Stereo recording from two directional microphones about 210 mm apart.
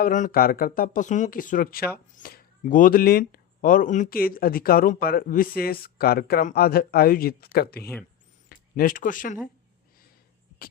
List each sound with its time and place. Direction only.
0.0 s speech: 40° left (ahead or behind)